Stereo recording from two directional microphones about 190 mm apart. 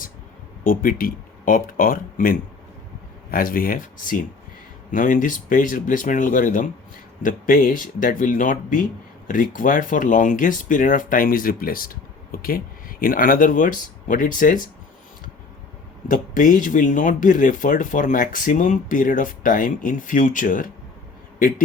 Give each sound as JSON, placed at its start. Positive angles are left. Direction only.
{"t": 0.6, "sound": "speech", "side_deg": 45}
{"t": 16.0, "sound": "speech", "side_deg": 45}